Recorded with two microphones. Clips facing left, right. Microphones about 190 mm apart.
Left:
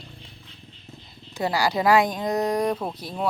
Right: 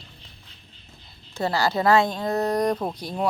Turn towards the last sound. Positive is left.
turn(degrees=5)  # may be behind; listen again after turning